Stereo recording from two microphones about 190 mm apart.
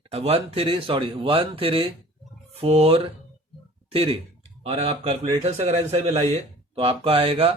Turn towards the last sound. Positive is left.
turn(degrees=-30)  # may be behind; listen again after turning